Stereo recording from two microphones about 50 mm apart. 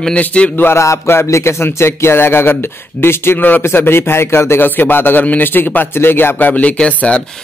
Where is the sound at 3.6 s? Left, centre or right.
Left.